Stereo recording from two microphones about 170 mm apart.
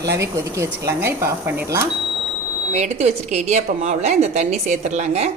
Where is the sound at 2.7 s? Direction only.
40° right (ahead or behind).